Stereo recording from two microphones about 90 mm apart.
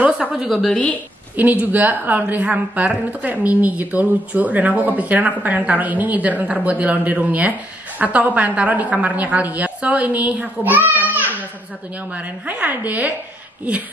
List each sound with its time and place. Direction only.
0.0 s a woman's voice: 10° right (ahead or behind)
0.7 s a woman's voice: 15° left (ahead or behind)
1.3 s a woman's voice: 20° right (ahead or behind)